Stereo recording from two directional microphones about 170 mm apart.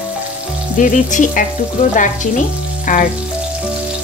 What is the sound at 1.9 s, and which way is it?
Frying, 50° left (ahead or behind).